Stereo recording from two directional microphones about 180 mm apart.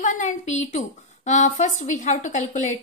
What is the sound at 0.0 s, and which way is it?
A woman's voice, 45° left (ahead or behind).